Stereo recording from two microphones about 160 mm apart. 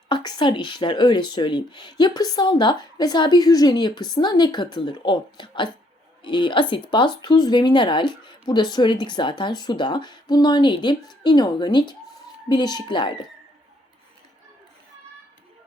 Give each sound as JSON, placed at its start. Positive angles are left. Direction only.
{"t": 0.1, "sound": "speech", "side_deg": 25}